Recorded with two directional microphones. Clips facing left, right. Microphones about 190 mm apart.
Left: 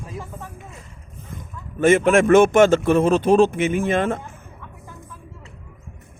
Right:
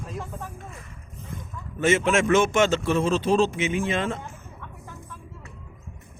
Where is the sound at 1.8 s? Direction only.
55° left (ahead or behind).